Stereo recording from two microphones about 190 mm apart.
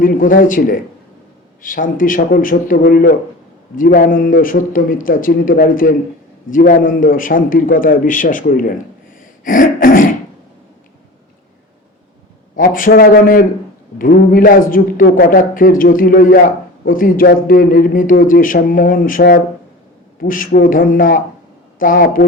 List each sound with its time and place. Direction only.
0.0 s a man's voice: 45° left (ahead or behind)
9.4 s a sound: 45° left (ahead or behind)
12.5 s a man's voice: 45° left (ahead or behind)